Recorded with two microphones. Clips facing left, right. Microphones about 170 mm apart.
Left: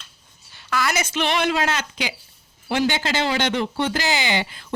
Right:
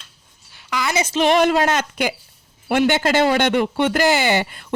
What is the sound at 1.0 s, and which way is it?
A woman's voice, 40° right (ahead or behind).